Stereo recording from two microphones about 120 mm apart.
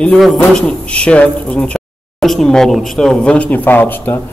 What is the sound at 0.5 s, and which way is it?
A man's voice, 10° left (ahead or behind).